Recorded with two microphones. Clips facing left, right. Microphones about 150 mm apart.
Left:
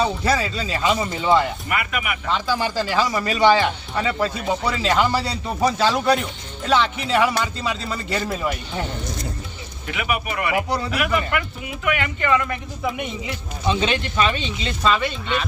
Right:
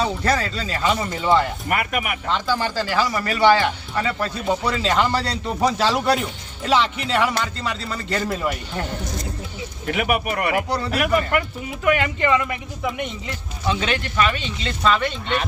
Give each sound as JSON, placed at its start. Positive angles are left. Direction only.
{"t": 0.0, "sound": "speech", "side_deg": 5}
{"t": 1.7, "sound": "speech", "side_deg": -40}
{"t": 2.3, "sound": "speech", "side_deg": 10}
{"t": 4.4, "sound": "speech", "side_deg": 0}
{"t": 8.2, "sound": "speech", "side_deg": 0}
{"t": 9.8, "sound": "speech", "side_deg": -50}
{"t": 12.3, "sound": "speech", "side_deg": -15}
{"t": 13.2, "sound": "speech", "side_deg": 20}